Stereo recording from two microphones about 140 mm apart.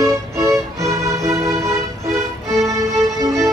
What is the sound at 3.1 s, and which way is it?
Music, 25° right (ahead or behind).